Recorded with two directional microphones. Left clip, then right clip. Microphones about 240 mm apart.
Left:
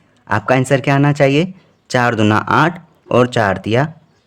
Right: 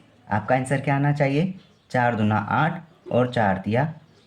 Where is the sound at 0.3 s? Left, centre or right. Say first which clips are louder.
Left 8 dB; left.